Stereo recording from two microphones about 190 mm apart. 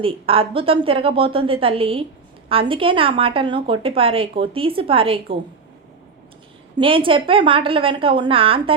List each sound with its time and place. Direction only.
0.0 s a woman's voice: 30° right (ahead or behind)
6.7 s a woman's voice: 25° right (ahead or behind)